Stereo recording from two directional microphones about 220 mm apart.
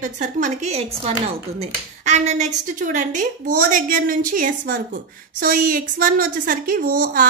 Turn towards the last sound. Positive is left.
turn(degrees=-35)  # may be behind; listen again after turning